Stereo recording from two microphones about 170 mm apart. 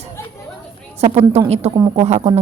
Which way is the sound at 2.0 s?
35° right (ahead or behind).